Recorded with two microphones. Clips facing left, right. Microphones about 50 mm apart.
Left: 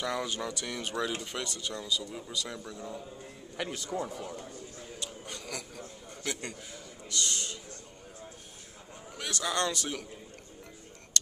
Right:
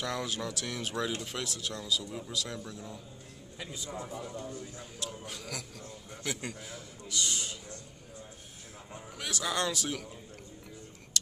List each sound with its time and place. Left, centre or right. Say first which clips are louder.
0.0 s speech: left 2 dB; centre
3.5 s a man's voice: left 6 dB; left
5.0 s a man's voice: right 2 dB; centre
9.2 s speech: left 1 dB; centre